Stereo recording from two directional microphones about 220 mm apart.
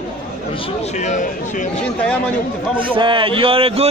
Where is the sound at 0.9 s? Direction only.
35° left (ahead or behind).